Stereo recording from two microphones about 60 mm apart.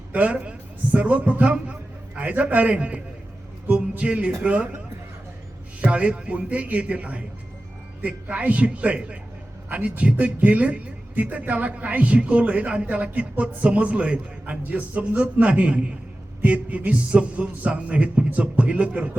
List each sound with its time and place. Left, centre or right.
0.1 s a man's voice: right
5.8 s speech: centre